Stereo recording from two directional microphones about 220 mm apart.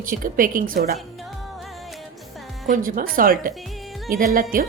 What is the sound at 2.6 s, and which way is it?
A woman's voice, 35° right (ahead or behind).